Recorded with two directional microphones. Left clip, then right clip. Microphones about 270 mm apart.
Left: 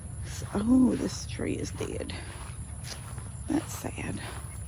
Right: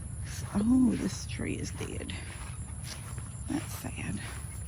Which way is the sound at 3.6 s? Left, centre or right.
Left.